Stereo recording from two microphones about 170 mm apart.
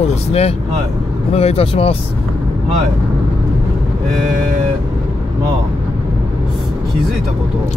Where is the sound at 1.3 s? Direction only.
35° left (ahead or behind).